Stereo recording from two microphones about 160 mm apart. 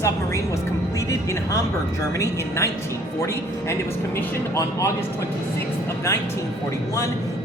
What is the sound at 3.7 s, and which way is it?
Speech, 15° left (ahead or behind).